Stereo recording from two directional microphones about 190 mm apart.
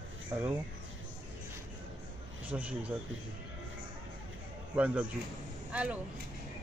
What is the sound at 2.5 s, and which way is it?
Speech, 5° right (ahead or behind).